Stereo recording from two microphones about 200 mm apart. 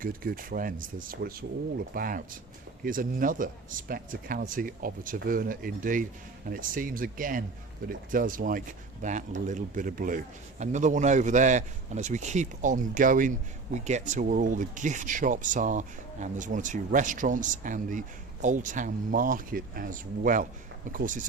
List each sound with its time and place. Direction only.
0.0 s a man's voice: 45° right (ahead or behind)